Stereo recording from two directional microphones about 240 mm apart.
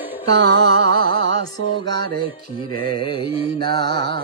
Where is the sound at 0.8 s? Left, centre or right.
Right.